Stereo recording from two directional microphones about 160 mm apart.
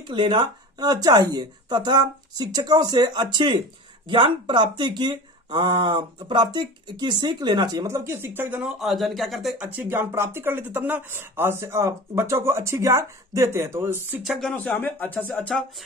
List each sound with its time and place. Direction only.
0.0 s speech: 30° right (ahead or behind); by 14.0 s 15° right (ahead or behind)
14.2 s speech: centre (ahead or behind)